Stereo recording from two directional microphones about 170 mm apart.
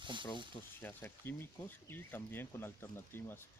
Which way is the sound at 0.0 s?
30° right (ahead or behind).